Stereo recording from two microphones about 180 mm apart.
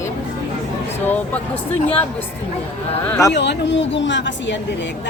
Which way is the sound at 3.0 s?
15° left (ahead or behind).